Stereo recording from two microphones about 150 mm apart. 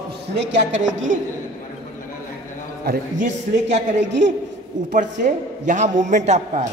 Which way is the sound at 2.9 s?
55° right (ahead or behind).